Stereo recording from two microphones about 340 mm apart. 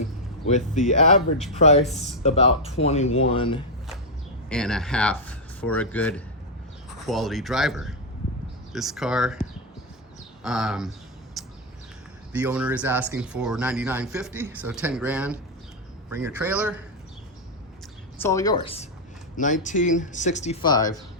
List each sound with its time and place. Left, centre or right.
0.4 s speech: left
1.8 s speech: centre
2.2 s speech: centre
4.4 s speech: centre
11.4 s bird: centre
12.3 s speech: centre
18.2 s speech: centre